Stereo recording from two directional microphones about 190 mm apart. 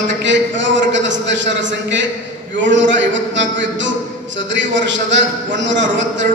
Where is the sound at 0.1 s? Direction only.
70° right (ahead or behind).